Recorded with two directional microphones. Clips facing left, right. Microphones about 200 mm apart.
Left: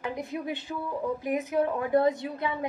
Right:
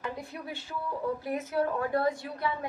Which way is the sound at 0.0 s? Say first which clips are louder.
Left 5 dB; 15° left (ahead or behind).